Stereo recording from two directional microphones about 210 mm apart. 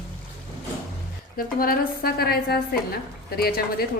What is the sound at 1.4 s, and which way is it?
A woman's voice, 45° left (ahead or behind).